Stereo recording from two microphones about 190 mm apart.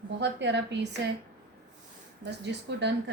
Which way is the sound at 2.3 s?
65° right (ahead or behind).